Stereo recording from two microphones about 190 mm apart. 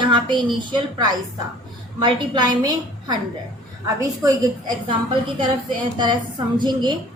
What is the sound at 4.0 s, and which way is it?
Speech, 20° right (ahead or behind).